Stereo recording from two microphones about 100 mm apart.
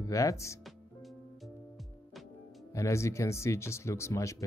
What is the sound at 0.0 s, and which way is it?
Speech, 35° left (ahead or behind).